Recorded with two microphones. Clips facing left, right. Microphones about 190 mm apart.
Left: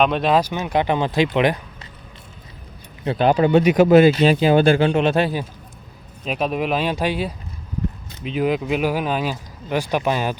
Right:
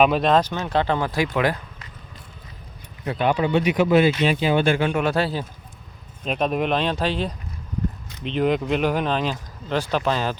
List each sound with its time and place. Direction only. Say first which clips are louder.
0.0 s speech: even; centre (ahead or behind); by 1.9 s 20° left (ahead or behind)
3.0 s speech: left 5 dB; 30° left (ahead or behind)
6.2 s speech: even; centre (ahead or behind)